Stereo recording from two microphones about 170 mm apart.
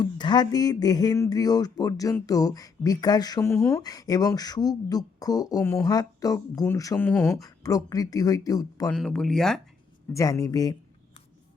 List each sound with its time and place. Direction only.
0.0 s speech: 25° left (ahead or behind); by 7.3 s 5° left (ahead or behind)
7.3 s speech: 20° left (ahead or behind)
8.9 s speech: 5° left (ahead or behind)
10.1 s speech: 20° left (ahead or behind)